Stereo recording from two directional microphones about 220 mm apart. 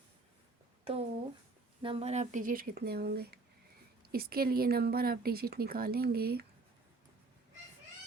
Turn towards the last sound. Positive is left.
turn(degrees=-45)  # may be behind; listen again after turning